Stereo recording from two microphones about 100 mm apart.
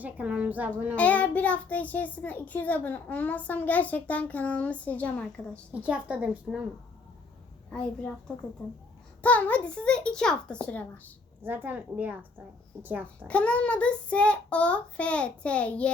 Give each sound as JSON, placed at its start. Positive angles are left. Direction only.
{"t": 0.0, "sound": "a woman's voice", "side_deg": -15}
{"t": 0.9, "sound": "a child's voice", "side_deg": 15}
{"t": 5.7, "sound": "a woman's voice", "side_deg": -15}
{"t": 7.7, "sound": "a child's voice", "side_deg": 10}
{"t": 9.2, "sound": "a child's voice", "side_deg": 15}
{"t": 11.4, "sound": "a woman's voice", "side_deg": -20}
{"t": 13.2, "sound": "a child's voice", "side_deg": 10}